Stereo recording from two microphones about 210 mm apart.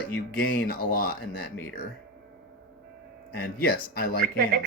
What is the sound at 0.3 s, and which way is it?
Speech, 45° left (ahead or behind).